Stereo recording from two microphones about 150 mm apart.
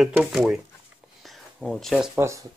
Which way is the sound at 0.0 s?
5° right (ahead or behind).